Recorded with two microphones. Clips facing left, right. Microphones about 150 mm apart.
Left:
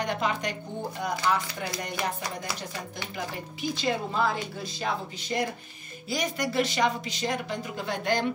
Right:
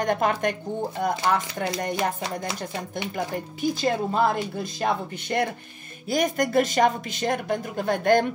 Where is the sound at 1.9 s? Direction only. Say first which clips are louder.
Right 5 dB; 25° right (ahead or behind).